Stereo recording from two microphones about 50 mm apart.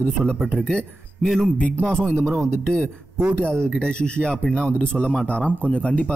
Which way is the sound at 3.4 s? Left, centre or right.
Left.